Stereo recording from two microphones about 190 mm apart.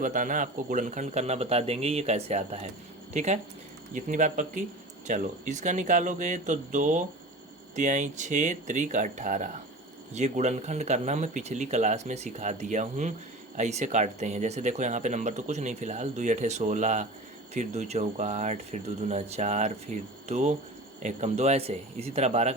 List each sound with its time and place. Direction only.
0.0 s speech: 45° right (ahead or behind)